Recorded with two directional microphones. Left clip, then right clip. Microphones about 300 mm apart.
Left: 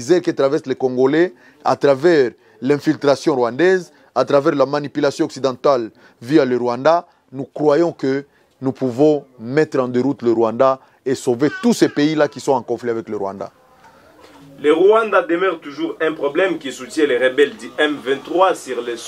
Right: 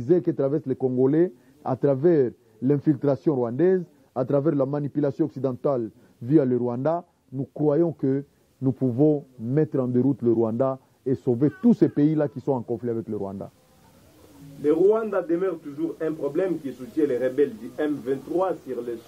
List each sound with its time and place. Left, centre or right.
0.0 s a man's voice: centre
7.3 s a man's voice: centre
12.4 s a man's voice: left
14.9 s a man's voice: centre